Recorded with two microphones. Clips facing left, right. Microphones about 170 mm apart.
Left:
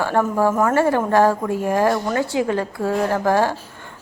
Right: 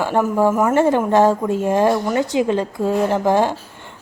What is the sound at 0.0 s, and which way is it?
Speech, 15° right (ahead or behind).